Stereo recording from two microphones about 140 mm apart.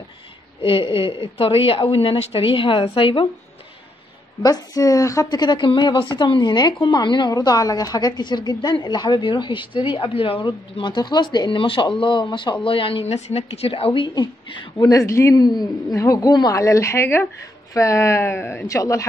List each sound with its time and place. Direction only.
0.6 s a woman's voice: 40° left (ahead or behind)
4.4 s a woman's voice: 25° left (ahead or behind)